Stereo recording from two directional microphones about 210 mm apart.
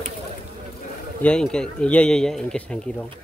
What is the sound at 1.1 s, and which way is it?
Speech, 5° left (ahead or behind).